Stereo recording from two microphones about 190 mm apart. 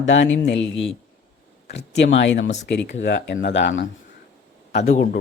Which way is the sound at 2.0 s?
70° left (ahead or behind).